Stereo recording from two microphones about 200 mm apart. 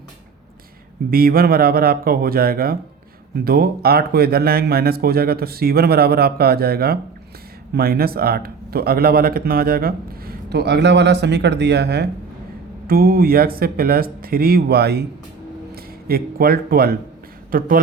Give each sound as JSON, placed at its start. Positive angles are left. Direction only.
{"t": 1.1, "sound": "speech", "side_deg": -45}